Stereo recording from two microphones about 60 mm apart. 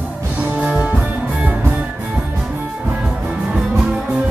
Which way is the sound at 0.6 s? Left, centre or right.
Centre.